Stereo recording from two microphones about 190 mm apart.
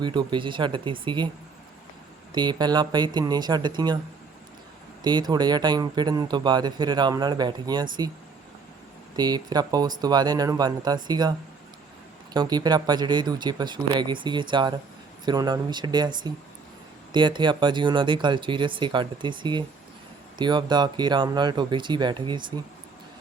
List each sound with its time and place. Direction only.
0.0 s speech: 25° right (ahead or behind)
2.3 s speech: 25° right (ahead or behind)
5.0 s speech: 20° right (ahead or behind)
9.1 s speech: 20° right (ahead or behind)